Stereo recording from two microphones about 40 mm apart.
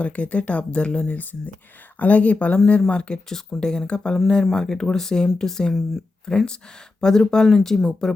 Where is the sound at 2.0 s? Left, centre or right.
Left.